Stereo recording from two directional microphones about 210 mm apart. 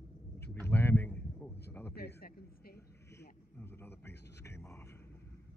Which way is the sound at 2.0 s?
50° left (ahead or behind).